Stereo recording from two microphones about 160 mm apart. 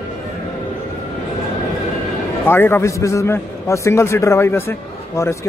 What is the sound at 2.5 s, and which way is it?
A man's voice, 15° left (ahead or behind).